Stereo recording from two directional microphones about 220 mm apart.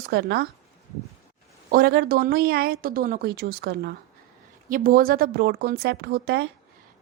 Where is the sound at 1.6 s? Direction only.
45° right (ahead or behind).